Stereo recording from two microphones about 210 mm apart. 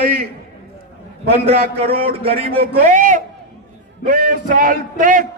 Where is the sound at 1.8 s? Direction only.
25° right (ahead or behind).